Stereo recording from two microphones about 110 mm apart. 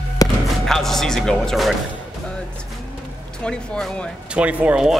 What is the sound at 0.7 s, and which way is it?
Speech, 5° left (ahead or behind).